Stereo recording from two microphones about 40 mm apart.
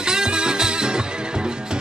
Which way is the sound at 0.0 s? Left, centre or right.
Centre.